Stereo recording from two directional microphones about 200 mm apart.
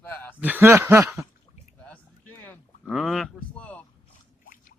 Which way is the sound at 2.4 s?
5° left (ahead or behind).